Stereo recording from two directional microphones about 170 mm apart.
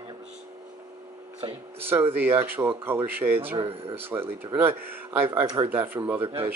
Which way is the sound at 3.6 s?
35° right (ahead or behind).